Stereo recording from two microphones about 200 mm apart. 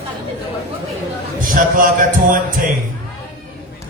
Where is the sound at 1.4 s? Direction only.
45° right (ahead or behind).